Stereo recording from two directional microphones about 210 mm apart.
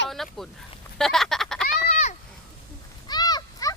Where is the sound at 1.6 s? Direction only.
35° left (ahead or behind).